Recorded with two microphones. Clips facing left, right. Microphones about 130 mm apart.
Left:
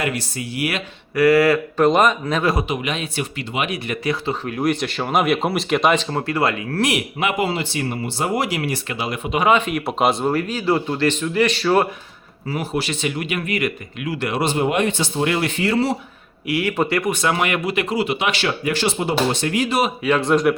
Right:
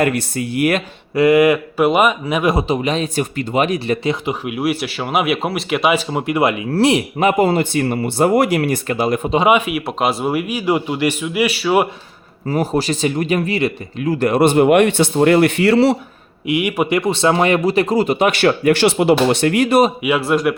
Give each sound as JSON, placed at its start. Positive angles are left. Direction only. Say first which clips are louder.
{"t": 0.0, "sound": "speech", "louder": "right 7 dB", "side_deg": -55}
{"t": 1.1, "sound": "a man's voice", "louder": "right 3 dB", "side_deg": -20}
{"t": 2.6, "sound": "speech", "louder": "right 6 dB", "side_deg": -35}
{"t": 4.0, "sound": "speech", "louder": "right 3 dB", "side_deg": -20}
{"t": 4.4, "sound": "speech", "louder": "even", "side_deg": -10}
{"t": 6.7, "sound": "speech", "louder": "right 6 dB", "side_deg": -30}
{"t": 9.5, "sound": "a man's voice", "louder": "left 1 dB", "side_deg": -10}
{"t": 12.5, "sound": "speech", "louder": "right 6 dB", "side_deg": -40}
{"t": 14.1, "sound": "a man's voice", "louder": "right 8 dB", "side_deg": -45}
{"t": 16.5, "sound": "a man's voice", "louder": "right 3 dB", "side_deg": -15}
{"t": 17.0, "sound": "speech", "louder": "right 5 dB", "side_deg": -25}
{"t": 20.0, "sound": "speech", "louder": "right 1 dB", "side_deg": -10}